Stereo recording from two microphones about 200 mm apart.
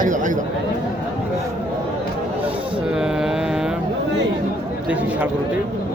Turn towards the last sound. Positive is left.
turn(degrees=-5)  # may be behind; listen again after turning